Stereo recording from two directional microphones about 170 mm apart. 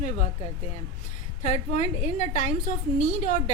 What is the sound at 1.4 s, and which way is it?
A woman's voice, 40° left (ahead or behind).